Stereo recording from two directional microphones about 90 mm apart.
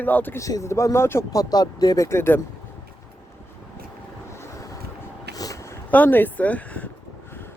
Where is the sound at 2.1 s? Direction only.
25° left (ahead or behind).